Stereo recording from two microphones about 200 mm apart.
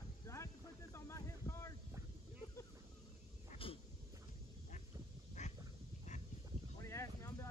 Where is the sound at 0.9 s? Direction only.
15° left (ahead or behind).